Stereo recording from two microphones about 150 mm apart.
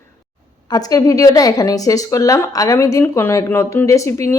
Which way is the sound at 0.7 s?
25° left (ahead or behind).